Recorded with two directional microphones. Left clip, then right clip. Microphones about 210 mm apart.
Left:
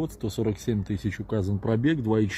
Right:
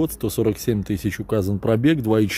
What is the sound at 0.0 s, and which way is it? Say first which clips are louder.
Speech: right 8 dB; 30° right (ahead or behind).